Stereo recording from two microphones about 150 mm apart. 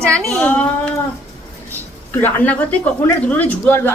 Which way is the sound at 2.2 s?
10° left (ahead or behind).